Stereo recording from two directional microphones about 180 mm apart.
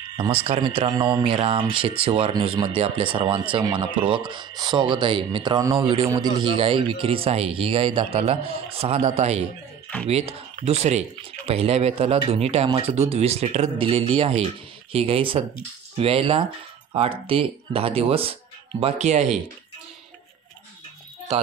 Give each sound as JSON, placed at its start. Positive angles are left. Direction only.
{"t": 0.2, "sound": "speech", "side_deg": -30}